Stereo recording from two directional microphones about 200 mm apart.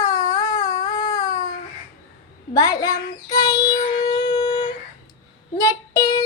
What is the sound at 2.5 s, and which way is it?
Child singing, 20° left (ahead or behind).